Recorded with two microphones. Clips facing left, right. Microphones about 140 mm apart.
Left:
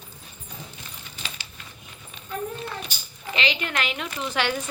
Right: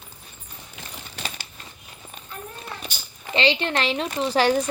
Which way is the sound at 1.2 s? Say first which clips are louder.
Right 5 dB; 70° right (ahead or behind).